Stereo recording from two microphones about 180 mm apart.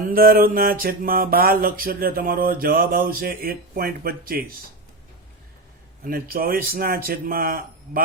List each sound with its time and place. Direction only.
0.1 s mantra: 55° right (ahead or behind)
6.1 s speech: 55° right (ahead or behind)